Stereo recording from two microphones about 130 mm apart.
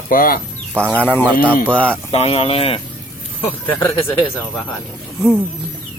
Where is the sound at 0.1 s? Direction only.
90° left.